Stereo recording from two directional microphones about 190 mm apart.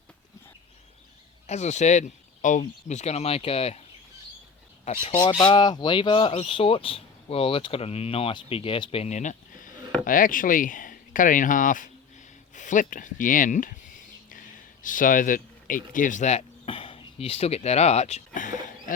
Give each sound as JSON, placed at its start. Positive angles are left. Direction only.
{"t": 1.5, "sound": "speech", "side_deg": 35}
{"t": 5.0, "sound": "speech", "side_deg": 25}
{"t": 14.3, "sound": "a sound", "side_deg": 45}